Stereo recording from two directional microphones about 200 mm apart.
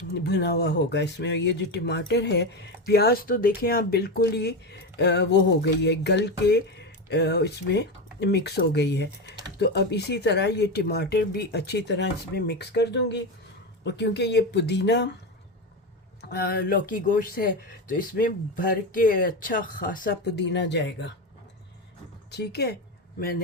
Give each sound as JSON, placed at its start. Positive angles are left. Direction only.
{"t": 0.1, "sound": "speech", "side_deg": 55}
{"t": 16.3, "sound": "speech", "side_deg": 50}
{"t": 22.3, "sound": "speech", "side_deg": 55}